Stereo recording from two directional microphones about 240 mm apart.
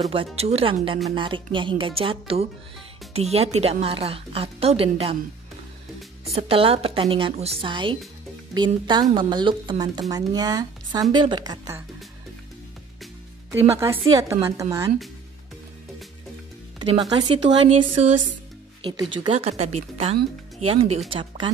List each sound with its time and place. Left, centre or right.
0.1 s a woman's voice: right
6.3 s a woman's voice: right
13.7 s speech: centre
17.2 s a woman's voice: centre
18.8 s a woman's voice: centre